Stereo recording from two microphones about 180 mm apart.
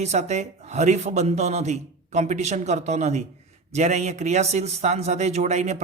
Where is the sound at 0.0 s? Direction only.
40° right (ahead or behind).